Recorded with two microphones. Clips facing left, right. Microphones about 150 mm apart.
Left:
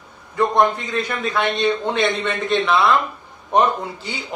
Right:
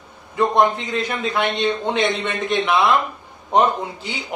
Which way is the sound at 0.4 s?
20° right (ahead or behind).